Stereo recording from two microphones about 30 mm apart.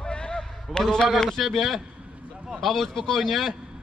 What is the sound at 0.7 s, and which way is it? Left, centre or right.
A man's voice, centre.